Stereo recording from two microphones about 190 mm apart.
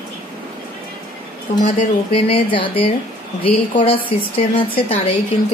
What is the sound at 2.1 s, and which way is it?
A woman's voice, 30° left (ahead or behind).